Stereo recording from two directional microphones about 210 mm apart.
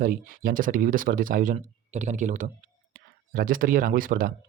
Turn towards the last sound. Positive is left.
turn(degrees=-40)  # may be behind; listen again after turning